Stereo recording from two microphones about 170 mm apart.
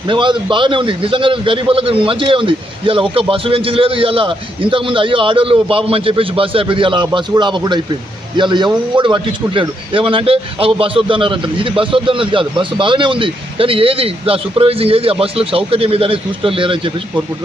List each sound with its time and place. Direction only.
0.1 s speech: 30° right (ahead or behind)